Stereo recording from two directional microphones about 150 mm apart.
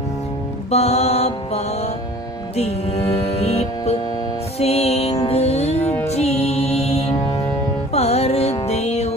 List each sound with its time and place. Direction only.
0.7 s mantra: 45° left (ahead or behind)
2.5 s music: 45° left (ahead or behind)